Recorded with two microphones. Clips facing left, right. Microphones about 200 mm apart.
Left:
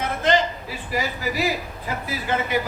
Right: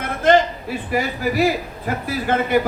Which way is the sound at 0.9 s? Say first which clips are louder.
Right 4 dB; 55° right (ahead or behind).